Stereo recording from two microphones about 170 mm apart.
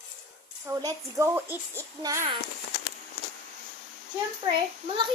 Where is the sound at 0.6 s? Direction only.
20° right (ahead or behind).